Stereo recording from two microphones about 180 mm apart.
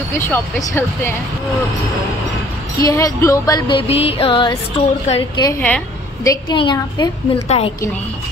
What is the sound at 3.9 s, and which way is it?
Music, 35° left (ahead or behind).